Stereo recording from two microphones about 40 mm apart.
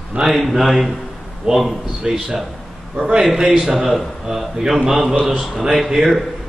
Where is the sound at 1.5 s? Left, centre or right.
Centre.